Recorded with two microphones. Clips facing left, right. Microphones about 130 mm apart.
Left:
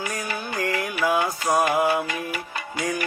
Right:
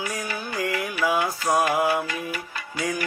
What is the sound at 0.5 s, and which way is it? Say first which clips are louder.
Music: left 1 dB; 5° right (ahead or behind).